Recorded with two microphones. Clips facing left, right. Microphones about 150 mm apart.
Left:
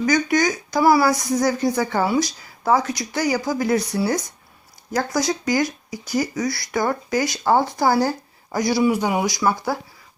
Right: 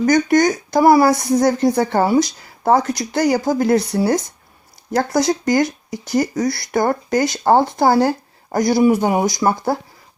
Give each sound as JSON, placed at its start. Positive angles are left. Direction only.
{"t": 0.0, "sound": "speech", "side_deg": -50}
{"t": 1.1, "sound": "speech", "side_deg": -25}
{"t": 1.7, "sound": "speech", "side_deg": -55}
{"t": 3.9, "sound": "speech", "side_deg": -35}
{"t": 4.9, "sound": "speech", "side_deg": -55}